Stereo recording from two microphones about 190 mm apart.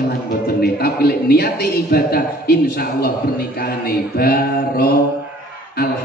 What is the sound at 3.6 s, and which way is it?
Mantra, 55° left (ahead or behind).